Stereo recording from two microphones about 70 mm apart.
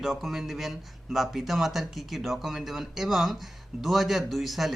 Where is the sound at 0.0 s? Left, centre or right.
Centre.